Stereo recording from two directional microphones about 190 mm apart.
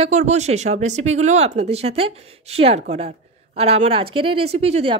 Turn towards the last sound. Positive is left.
turn(degrees=-30)  # may be behind; listen again after turning